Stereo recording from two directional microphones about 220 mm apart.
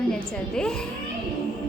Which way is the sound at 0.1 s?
5° left (ahead or behind).